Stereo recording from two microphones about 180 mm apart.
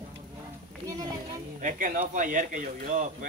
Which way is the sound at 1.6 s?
45° right (ahead or behind).